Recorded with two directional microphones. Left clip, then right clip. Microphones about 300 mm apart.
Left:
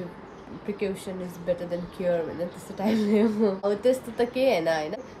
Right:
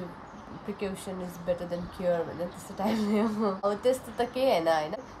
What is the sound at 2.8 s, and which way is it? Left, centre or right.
Speech, centre.